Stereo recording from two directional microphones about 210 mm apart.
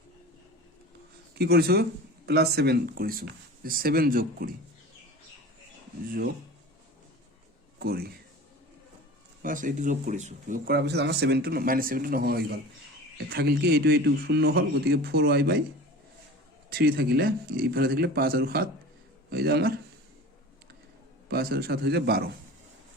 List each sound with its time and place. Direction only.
1.4 s speech: 50° right (ahead or behind)
7.8 s a man's voice: 45° right (ahead or behind)
9.4 s speech: 40° right (ahead or behind)
10.7 s speech: 50° right (ahead or behind)
16.6 s speech: 45° right (ahead or behind)
21.2 s speech: 45° right (ahead or behind)